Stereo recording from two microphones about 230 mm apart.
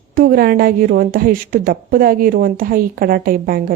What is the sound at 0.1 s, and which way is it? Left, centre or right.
A woman's voice, right.